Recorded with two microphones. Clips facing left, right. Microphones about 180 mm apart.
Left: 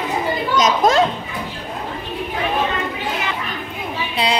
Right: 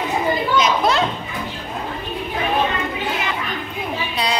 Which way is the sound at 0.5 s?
45° left (ahead or behind).